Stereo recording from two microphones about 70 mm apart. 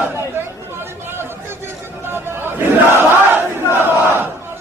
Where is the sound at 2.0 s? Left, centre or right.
Right.